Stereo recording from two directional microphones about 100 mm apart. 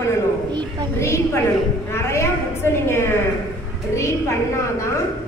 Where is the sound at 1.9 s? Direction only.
30° left (ahead or behind).